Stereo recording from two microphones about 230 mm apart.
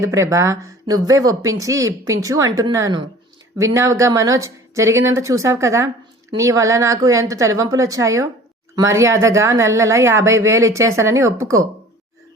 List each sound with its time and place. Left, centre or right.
0.0 s speech: centre